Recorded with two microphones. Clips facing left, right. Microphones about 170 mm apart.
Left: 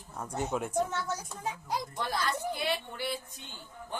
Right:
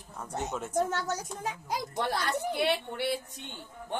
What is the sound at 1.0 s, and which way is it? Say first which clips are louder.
Speech: right 2 dB; 85° right.